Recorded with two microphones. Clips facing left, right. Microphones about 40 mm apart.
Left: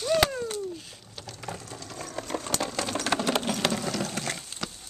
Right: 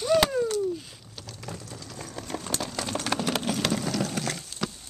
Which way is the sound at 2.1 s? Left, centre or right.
Centre.